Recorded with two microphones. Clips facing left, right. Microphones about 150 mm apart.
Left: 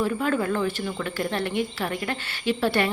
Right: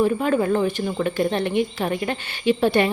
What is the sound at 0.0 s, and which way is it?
A woman's voice, 20° right (ahead or behind).